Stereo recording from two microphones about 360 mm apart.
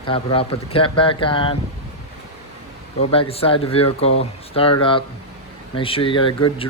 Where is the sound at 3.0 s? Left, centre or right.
Centre.